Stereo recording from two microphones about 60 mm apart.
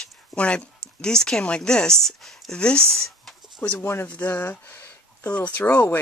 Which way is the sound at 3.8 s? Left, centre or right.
Left.